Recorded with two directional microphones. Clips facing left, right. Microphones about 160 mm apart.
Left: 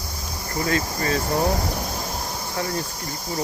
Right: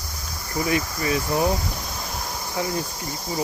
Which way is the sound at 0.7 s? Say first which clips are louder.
Even; 15° right (ahead or behind).